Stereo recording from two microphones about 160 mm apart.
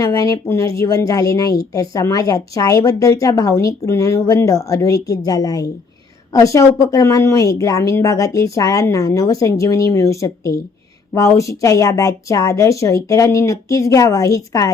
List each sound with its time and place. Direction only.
0.0 s speech: 20° left (ahead or behind)